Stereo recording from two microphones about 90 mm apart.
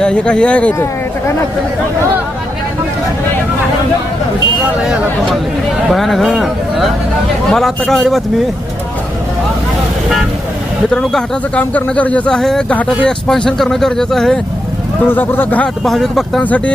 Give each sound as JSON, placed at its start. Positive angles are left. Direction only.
{"t": 0.0, "sound": "speech", "side_deg": 10}
{"t": 4.8, "sound": "speech", "side_deg": -5}
{"t": 10.9, "sound": "speech", "side_deg": 5}
{"t": 11.6, "sound": "speech", "side_deg": 15}
{"t": 15.0, "sound": "speech", "side_deg": 25}
{"t": 15.8, "sound": "speech", "side_deg": 0}
{"t": 16.4, "sound": "speech", "side_deg": 15}